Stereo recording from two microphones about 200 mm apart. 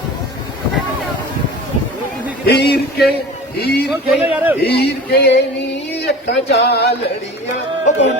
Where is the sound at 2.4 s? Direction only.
55° left (ahead or behind).